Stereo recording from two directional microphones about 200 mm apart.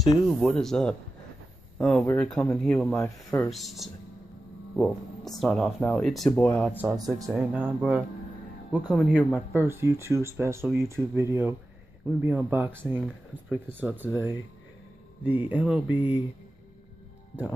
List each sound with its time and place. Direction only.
0.0 s speech: centre (ahead or behind)
2.9 s speech: 15° left (ahead or behind)
3.4 s speech: centre (ahead or behind)
6.8 s speech: 15° right (ahead or behind)
7.3 s speech: 5° right (ahead or behind)
9.6 s speech: 10° right (ahead or behind)
15.2 s speech: 10° right (ahead or behind)